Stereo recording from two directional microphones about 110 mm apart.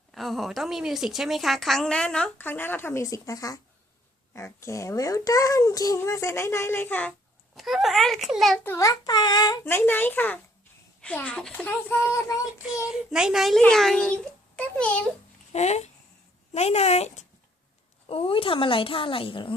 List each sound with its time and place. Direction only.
0.1 s a woman's voice: centre (ahead or behind); by 7.1 s 20° left (ahead or behind)
7.5 s a woman's voice: centre (ahead or behind)
8.5 s a child's voice: 20° left (ahead or behind)
8.8 s child singing: 35° left (ahead or behind)
9.6 s a child's voice: 20° left (ahead or behind)
12.9 s a woman's voice: 5° right (ahead or behind); by 15.0 s 10° left (ahead or behind)
15.5 s speech: 90° left
16.5 s speech: 75° left (ahead or behind)
18.1 s speech: 60° left (ahead or behind)